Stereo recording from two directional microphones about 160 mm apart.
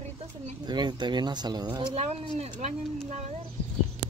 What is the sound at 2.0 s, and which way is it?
Speech, 45° right (ahead or behind).